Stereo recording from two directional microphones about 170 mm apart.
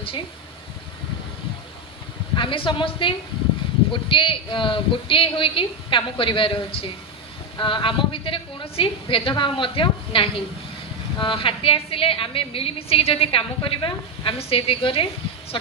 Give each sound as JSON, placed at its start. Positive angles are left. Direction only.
{"t": 2.3, "sound": "a woman's voice", "side_deg": 30}